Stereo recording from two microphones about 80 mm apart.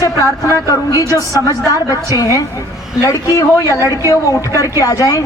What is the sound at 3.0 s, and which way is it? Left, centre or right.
Speech, left.